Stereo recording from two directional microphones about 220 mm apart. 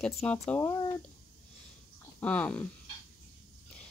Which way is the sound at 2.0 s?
5° left (ahead or behind).